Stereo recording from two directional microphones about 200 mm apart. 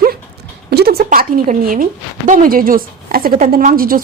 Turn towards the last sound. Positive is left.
turn(degrees=-45)  # may be behind; listen again after turning